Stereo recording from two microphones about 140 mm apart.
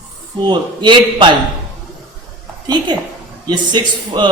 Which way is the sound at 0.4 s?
35° right (ahead or behind).